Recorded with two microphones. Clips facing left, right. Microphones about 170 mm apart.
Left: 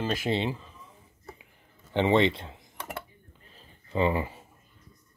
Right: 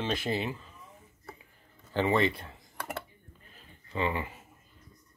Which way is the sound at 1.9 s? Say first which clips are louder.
Left 4 dB; 25° left (ahead or behind).